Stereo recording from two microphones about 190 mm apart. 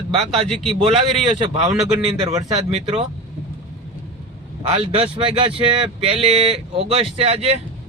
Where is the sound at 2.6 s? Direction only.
30° right (ahead or behind).